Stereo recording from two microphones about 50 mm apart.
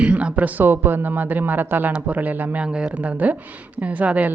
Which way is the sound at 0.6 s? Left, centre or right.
Right.